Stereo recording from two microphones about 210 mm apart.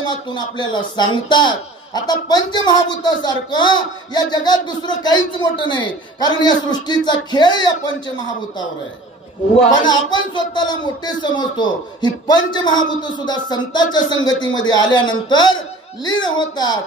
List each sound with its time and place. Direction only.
0.3 s speech: 20° left (ahead or behind)
9.8 s speech: 20° left (ahead or behind)